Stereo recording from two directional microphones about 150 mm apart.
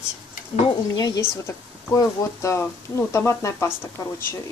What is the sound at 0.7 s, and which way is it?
Speech, 25° left (ahead or behind).